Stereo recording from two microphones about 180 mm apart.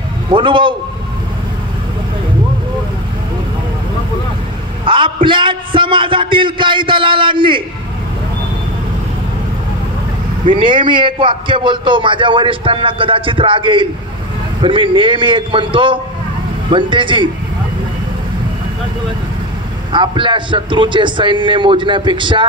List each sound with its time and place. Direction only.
0.3 s a man's voice: 30° right (ahead or behind)
4.8 s a man's voice: 25° right (ahead or behind)
10.4 s a man's voice: 25° right (ahead or behind)
19.9 s a man's voice: 25° right (ahead or behind)